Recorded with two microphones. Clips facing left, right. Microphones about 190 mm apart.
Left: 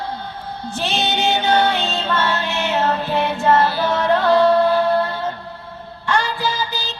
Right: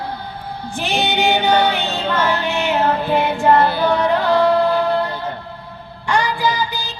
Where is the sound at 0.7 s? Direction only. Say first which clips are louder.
Right 2 dB; 15° right (ahead or behind).